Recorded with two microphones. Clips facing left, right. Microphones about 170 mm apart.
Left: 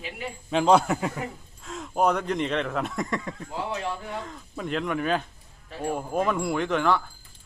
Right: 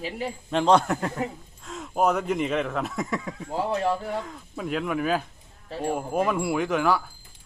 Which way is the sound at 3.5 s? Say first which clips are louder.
Right 6 dB; 40° right (ahead or behind).